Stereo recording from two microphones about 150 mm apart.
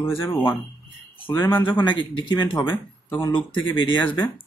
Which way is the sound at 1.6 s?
35° left (ahead or behind).